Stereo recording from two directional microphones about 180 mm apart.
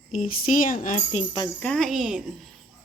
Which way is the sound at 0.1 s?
45° left (ahead or behind).